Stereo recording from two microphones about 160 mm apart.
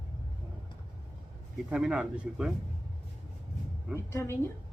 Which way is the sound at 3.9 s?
15° left (ahead or behind).